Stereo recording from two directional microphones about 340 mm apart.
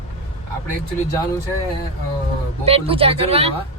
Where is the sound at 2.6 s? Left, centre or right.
Centre.